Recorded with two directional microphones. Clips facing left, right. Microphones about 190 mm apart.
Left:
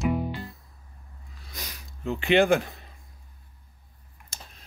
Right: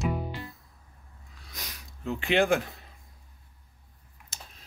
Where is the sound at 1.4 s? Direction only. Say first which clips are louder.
Left 2 dB; centre (ahead or behind).